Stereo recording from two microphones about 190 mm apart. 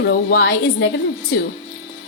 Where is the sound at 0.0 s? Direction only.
65° left (ahead or behind).